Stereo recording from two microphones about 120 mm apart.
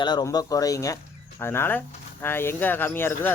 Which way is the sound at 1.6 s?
15° left (ahead or behind).